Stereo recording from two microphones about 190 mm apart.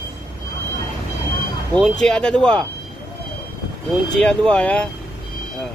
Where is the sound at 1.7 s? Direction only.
Centre (ahead or behind).